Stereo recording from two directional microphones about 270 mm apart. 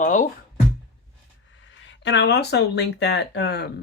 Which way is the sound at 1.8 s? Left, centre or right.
Left.